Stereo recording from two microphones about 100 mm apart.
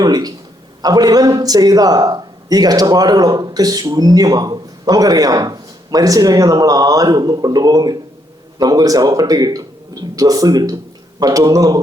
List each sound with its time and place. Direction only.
0.0 s a man's voice: 40° right (ahead or behind)